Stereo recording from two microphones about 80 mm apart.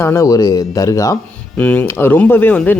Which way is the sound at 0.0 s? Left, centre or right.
Left.